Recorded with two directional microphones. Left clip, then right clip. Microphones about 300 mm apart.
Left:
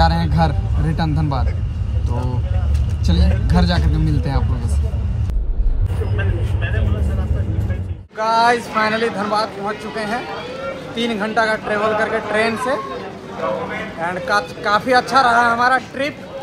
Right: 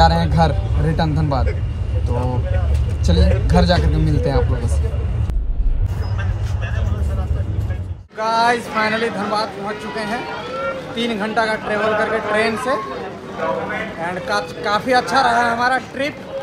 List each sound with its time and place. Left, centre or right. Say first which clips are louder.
0.0 s speech: right 3 dB; centre
3.1 s speech: right 4 dB; centre
8.2 s speech: left 2 dB; centre